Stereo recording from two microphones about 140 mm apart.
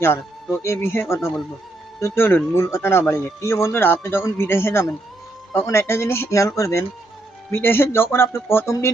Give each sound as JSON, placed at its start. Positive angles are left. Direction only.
{"t": 0.6, "sound": "speech", "side_deg": 20}